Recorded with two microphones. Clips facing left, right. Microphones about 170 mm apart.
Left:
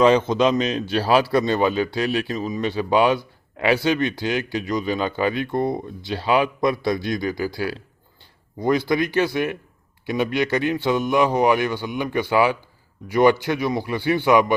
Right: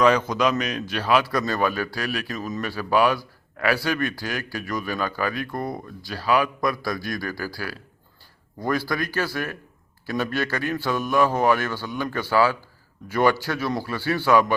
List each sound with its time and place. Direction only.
0.0 s a man's voice: 25° left (ahead or behind)